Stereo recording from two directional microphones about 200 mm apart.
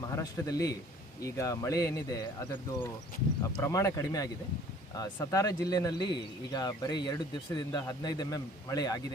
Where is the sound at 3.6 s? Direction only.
15° left (ahead or behind).